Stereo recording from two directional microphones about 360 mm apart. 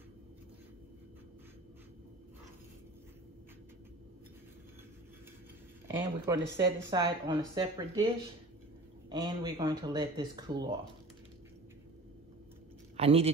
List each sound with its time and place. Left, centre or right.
5.9 s speech: centre
9.1 s speech: centre
12.9 s a man's voice: centre